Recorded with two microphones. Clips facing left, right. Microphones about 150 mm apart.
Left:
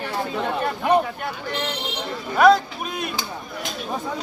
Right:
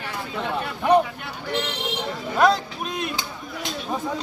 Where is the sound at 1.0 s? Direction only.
45° left (ahead or behind).